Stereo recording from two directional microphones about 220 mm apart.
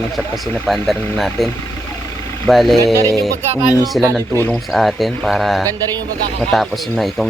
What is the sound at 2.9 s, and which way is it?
Speech, 15° right (ahead or behind).